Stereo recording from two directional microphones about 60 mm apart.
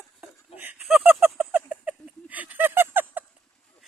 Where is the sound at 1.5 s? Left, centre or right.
Right.